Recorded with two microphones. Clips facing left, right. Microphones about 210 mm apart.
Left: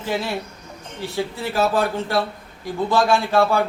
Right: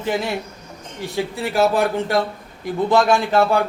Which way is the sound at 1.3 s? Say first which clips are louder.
Right 3 dB; 15° right (ahead or behind).